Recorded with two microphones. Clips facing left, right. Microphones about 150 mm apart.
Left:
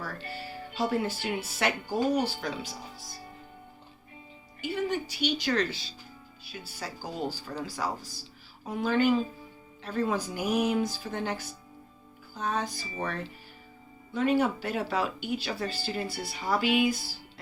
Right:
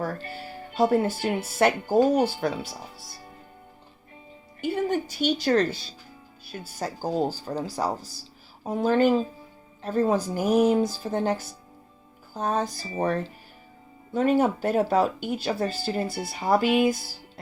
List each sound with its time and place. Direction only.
0.0 s speech: 50° right (ahead or behind)
4.6 s speech: 50° right (ahead or behind)